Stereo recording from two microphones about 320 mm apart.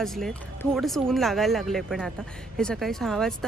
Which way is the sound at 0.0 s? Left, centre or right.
Centre.